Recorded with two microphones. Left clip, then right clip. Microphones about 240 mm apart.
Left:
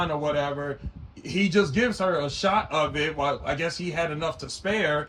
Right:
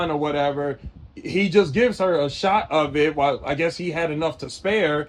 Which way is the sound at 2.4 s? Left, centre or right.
Centre.